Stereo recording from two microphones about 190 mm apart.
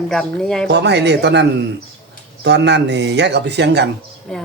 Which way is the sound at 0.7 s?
65° right (ahead or behind).